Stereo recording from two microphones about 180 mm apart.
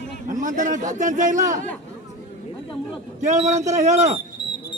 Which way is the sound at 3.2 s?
40° right (ahead or behind).